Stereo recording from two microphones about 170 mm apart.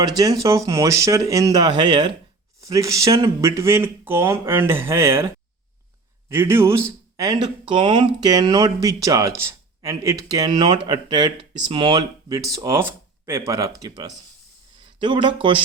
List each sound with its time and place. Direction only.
0.0 s speech: 20° right (ahead or behind)
6.2 s speech: 15° right (ahead or behind); by 15.5 s 30° right (ahead or behind)